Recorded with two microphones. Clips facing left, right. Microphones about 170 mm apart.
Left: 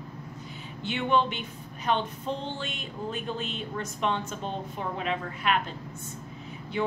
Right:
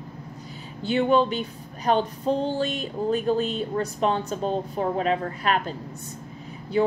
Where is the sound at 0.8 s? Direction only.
40° right (ahead or behind).